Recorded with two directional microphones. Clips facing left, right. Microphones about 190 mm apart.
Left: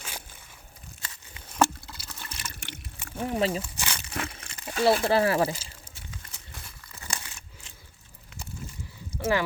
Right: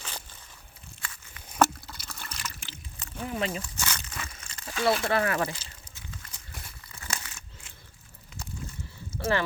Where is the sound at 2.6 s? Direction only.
70° left (ahead or behind).